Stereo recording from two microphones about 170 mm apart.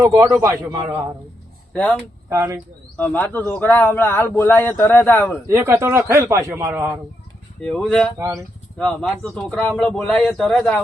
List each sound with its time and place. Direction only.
0.0 s a man's voice: 20° right (ahead or behind)
1.7 s speech: 5° left (ahead or behind)
2.3 s a man's voice: 15° right (ahead or behind)
3.0 s speech: 10° left (ahead or behind)
5.5 s a man's voice: 15° right (ahead or behind)
7.6 s speech: 5° left (ahead or behind)
8.2 s a man's voice: 15° right (ahead or behind)
8.8 s speech: 5° left (ahead or behind)